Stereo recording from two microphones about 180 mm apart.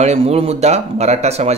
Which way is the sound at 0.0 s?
35° right (ahead or behind).